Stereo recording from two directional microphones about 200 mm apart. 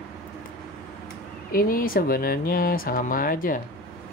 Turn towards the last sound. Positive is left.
turn(degrees=45)  # may be behind; listen again after turning